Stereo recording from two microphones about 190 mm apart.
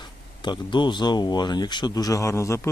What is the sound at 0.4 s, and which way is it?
Speech, 25° left (ahead or behind).